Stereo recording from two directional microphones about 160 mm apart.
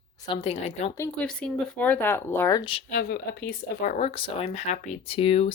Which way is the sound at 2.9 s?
70° left (ahead or behind).